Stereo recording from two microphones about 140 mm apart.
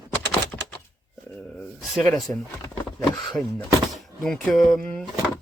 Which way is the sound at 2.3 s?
10° left (ahead or behind).